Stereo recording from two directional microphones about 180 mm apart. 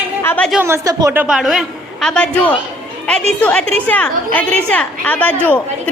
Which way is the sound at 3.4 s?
5° left (ahead or behind).